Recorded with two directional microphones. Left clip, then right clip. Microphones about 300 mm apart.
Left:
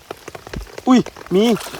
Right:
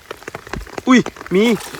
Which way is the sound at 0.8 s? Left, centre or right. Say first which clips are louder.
Right 1 dB; centre.